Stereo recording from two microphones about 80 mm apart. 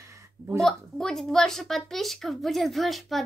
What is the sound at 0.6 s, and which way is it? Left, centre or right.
A woman's voice, centre.